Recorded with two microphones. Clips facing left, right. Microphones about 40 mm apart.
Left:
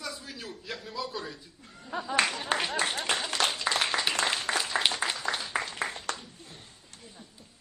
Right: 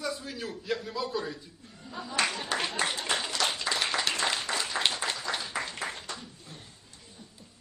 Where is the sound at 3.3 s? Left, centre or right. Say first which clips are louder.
Left 2 dB; left.